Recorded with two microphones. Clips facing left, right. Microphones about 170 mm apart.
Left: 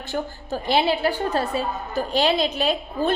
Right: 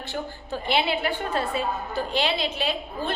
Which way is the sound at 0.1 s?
40° left (ahead or behind).